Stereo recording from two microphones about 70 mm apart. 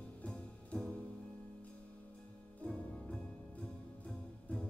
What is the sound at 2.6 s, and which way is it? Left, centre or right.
Music, centre.